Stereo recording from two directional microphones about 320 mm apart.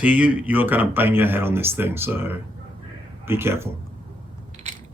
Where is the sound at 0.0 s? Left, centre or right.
Centre.